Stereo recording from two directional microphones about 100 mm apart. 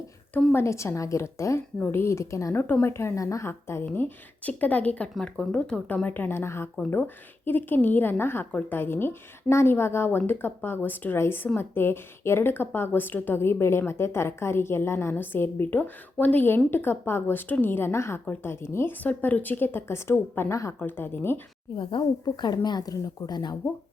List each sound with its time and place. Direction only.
0.3 s a woman's voice: 25° left (ahead or behind)
21.8 s a woman's voice: 55° left (ahead or behind)
22.5 s a woman's voice: 40° left (ahead or behind)